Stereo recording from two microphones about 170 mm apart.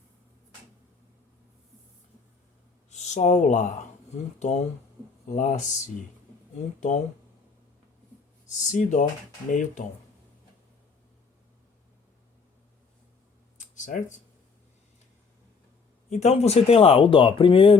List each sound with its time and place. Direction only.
2.9 s speech: 45° left (ahead or behind)
5.3 s speech: 45° left (ahead or behind)
8.5 s speech: 45° left (ahead or behind)
13.6 s a sound: 50° left (ahead or behind)
16.0 s speech: 40° left (ahead or behind)